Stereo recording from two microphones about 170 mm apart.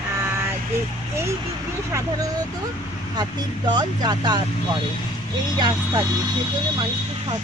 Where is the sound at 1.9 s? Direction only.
20° right (ahead or behind).